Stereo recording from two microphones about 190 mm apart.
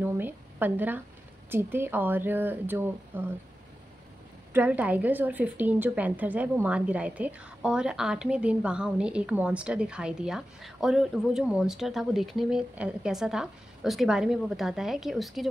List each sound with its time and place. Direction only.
0.0 s a woman's voice: 10° right (ahead or behind)
4.6 s a woman's voice: 10° right (ahead or behind)